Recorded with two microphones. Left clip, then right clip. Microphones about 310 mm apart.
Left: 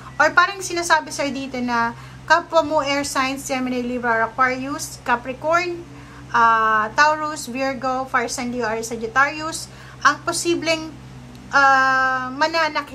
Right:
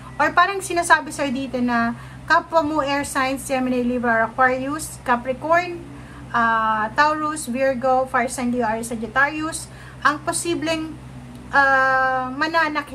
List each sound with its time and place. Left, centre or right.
0.2 s a woman's voice: centre